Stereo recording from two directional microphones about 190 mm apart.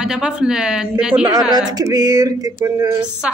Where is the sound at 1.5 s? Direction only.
20° right (ahead or behind).